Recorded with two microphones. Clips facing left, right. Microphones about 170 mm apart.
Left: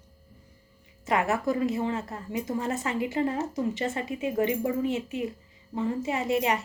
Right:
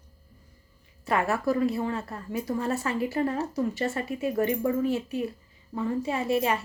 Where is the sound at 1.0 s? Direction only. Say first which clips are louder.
Even; 20° left (ahead or behind).